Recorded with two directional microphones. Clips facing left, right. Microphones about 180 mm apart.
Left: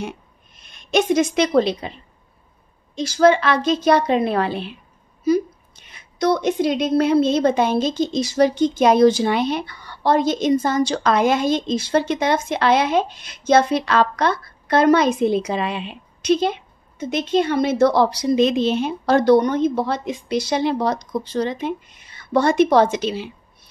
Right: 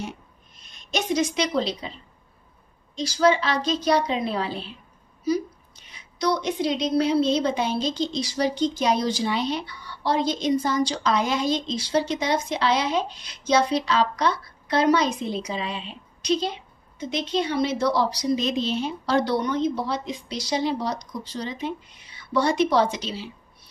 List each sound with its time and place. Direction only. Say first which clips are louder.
0.6 s speech: left 9 dB; 60° left (ahead or behind)
3.0 s speech: left 5 dB; 55° left (ahead or behind)
5.9 s a woman's voice: left 5 dB; 55° left (ahead or behind)